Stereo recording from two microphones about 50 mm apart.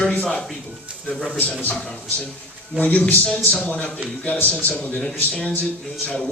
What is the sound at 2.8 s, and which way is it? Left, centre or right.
A man's voice, left.